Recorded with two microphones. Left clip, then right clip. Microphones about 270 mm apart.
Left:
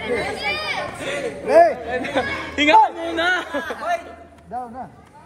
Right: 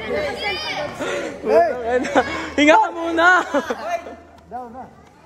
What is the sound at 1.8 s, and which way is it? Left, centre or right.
Speech, right.